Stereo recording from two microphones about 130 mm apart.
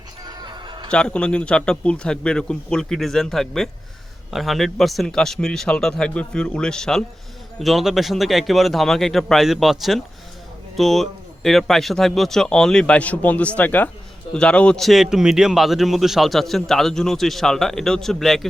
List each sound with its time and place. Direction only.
0.3 s music: 35° right (ahead or behind)
0.9 s a man's voice: 5° left (ahead or behind)